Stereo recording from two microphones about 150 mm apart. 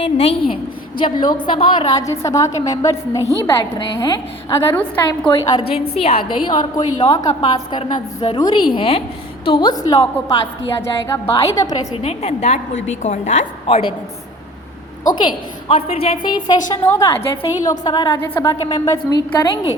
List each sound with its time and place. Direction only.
0.0 s a woman's voice: 45° left (ahead or behind)
0.9 s a woman's voice: 30° left (ahead or behind)
2.0 s a woman's voice: 20° left (ahead or behind)
5.5 s a woman's voice: 30° left (ahead or behind)
5.7 s a woman's voice: 40° left (ahead or behind); by 11.9 s 25° left (ahead or behind)
12.0 s a woman's voice: 45° left (ahead or behind)
15.1 s a woman's voice: 30° left (ahead or behind)
16.8 s a woman's voice: 20° left (ahead or behind)